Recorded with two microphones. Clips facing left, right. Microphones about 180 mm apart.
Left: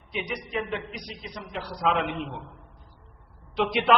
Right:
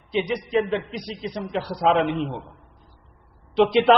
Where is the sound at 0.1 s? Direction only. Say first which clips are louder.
Right 9 dB; 30° right (ahead or behind).